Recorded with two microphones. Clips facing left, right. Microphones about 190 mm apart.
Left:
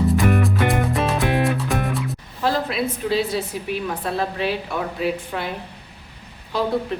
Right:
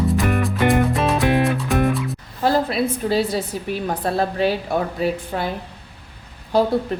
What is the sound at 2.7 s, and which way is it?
A woman's voice, 40° right (ahead or behind).